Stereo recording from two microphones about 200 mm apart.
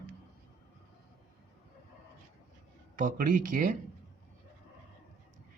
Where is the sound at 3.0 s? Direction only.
45° right (ahead or behind).